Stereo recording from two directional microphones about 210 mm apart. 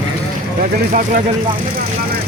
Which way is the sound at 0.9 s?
40° right (ahead or behind).